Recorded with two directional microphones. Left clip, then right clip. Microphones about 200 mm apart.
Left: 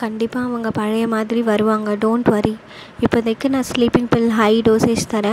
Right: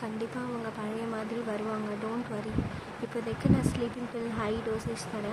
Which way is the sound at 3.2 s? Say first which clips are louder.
Left 11 dB; 45° left (ahead or behind).